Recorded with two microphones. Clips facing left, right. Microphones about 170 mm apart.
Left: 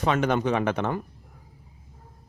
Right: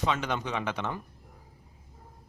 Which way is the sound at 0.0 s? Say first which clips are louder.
Left 7 dB; 55° left (ahead or behind).